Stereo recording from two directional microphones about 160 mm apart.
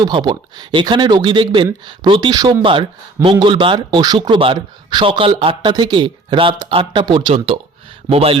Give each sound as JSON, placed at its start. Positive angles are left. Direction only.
{"t": 0.0, "sound": "a man's voice", "side_deg": -30}